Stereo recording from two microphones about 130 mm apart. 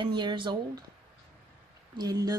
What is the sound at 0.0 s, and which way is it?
Speech, 35° right (ahead or behind).